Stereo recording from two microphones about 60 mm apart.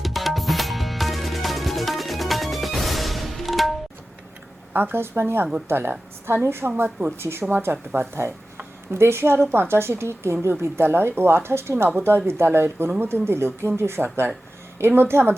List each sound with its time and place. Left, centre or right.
0.0 s music: centre
4.7 s speech: right
7.2 s a woman's voice: right